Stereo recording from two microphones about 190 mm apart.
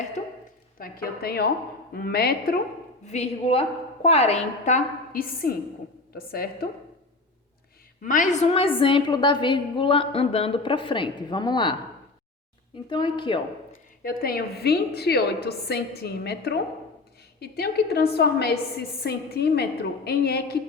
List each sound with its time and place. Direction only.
0.8 s a woman's voice: 50° left (ahead or behind)
3.1 s a woman's voice: 35° left (ahead or behind); by 6.7 s 50° left (ahead or behind)
8.0 s a woman's voice: 45° left (ahead or behind); by 11.7 s 25° left (ahead or behind)
12.9 s a woman's voice: 25° left (ahead or behind)
14.0 s a woman's voice: 50° left (ahead or behind)